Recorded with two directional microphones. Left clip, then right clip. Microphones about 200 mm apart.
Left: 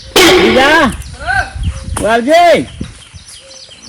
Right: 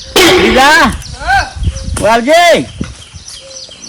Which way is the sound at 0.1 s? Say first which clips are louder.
Even; centre (ahead or behind).